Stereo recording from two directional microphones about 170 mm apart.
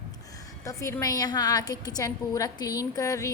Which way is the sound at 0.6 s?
20° left (ahead or behind).